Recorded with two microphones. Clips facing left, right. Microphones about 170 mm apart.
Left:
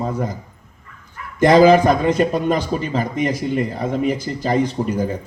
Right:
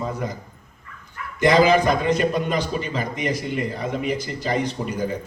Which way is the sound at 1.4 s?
50° left (ahead or behind).